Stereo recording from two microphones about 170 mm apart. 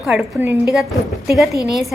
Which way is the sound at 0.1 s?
10° right (ahead or behind).